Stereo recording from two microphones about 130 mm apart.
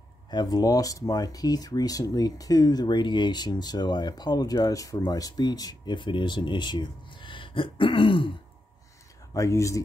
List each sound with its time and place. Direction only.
0.3 s speech: 30° left (ahead or behind)
9.3 s speech: 25° left (ahead or behind)